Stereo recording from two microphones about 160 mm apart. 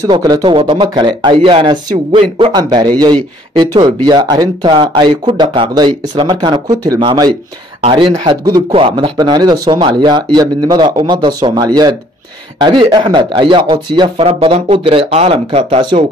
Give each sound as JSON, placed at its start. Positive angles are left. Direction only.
{"t": 0.0, "sound": "speech", "side_deg": -25}